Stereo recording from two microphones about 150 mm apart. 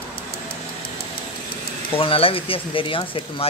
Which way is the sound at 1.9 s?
35° left (ahead or behind).